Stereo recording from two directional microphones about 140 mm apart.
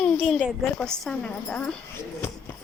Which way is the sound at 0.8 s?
5° left (ahead or behind).